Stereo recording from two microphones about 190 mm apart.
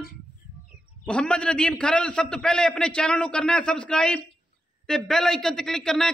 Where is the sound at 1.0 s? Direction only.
5° left (ahead or behind).